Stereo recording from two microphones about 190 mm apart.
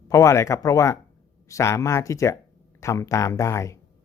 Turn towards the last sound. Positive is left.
turn(degrees=15)  # may be behind; listen again after turning